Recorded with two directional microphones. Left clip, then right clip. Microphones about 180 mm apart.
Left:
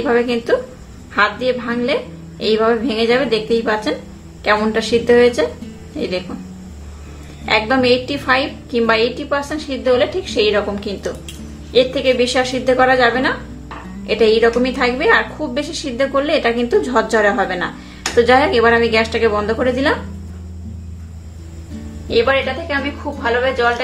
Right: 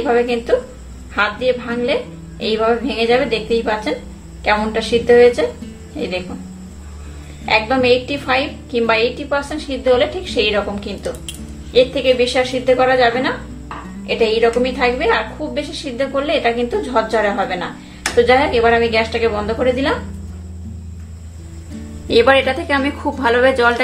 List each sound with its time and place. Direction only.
0.0 s a woman's voice: 20° left (ahead or behind)
7.4 s a woman's voice: 15° left (ahead or behind)
22.0 s speech: 40° right (ahead or behind)